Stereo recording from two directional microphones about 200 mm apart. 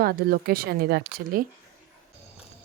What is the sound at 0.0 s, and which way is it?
Speech, 50° right (ahead or behind).